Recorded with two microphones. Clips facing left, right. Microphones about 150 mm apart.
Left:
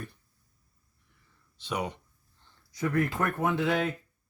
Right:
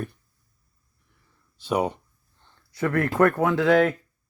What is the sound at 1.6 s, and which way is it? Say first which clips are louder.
Speech: right 9 dB; 40° right (ahead or behind).